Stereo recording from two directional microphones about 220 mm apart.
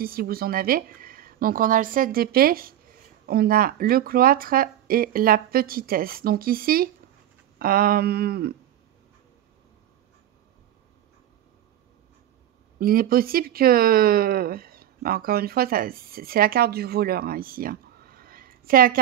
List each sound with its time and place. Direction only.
0.0 s speech: 40° right (ahead or behind)
12.7 s speech: 40° right (ahead or behind)